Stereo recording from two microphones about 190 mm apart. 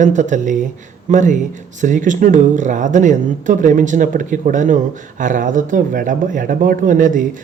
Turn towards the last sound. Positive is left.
turn(degrees=-45)  # may be behind; listen again after turning